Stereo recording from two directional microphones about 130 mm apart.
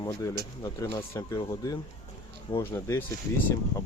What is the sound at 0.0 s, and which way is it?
Speech, 30° left (ahead or behind).